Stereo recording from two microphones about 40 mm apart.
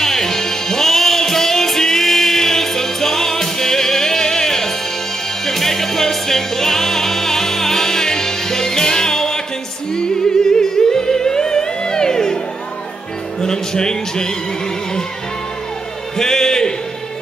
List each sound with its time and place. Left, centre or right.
0.0 s music: centre
13.4 s music: centre
16.2 s a sound: centre